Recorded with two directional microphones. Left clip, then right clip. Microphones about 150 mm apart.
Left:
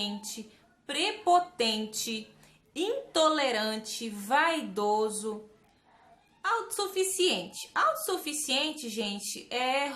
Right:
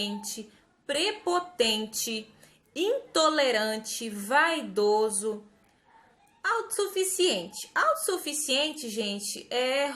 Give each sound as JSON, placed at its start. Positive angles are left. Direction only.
{"t": 0.9, "sound": "a woman's voice", "side_deg": 15}
{"t": 6.4, "sound": "a woman's voice", "side_deg": 15}